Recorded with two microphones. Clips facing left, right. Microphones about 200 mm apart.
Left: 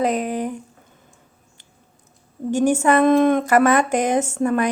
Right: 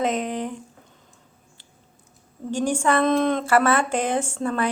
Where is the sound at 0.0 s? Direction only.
5° left (ahead or behind).